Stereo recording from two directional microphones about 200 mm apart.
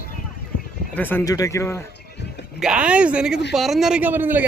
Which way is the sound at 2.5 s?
5° right (ahead or behind).